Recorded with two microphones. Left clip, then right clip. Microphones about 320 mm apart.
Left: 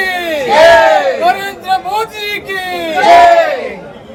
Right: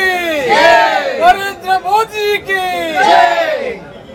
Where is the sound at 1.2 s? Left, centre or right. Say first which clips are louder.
Right 2 dB; centre.